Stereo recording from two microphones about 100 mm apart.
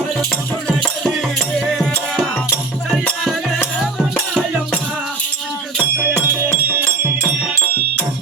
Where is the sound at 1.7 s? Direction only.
5° left (ahead or behind).